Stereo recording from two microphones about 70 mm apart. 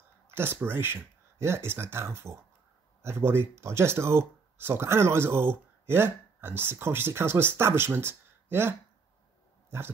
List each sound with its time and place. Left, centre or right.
0.3 s speech: right